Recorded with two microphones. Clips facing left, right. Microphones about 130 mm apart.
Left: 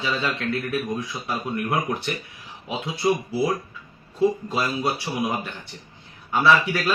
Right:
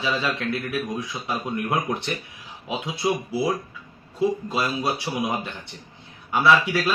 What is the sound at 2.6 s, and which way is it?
A man's voice, 15° right (ahead or behind).